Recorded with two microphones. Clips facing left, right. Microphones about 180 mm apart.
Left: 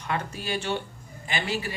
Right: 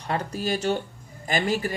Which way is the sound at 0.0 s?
35° right (ahead or behind).